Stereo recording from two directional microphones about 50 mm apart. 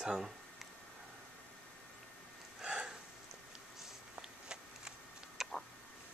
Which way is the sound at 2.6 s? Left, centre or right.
Centre.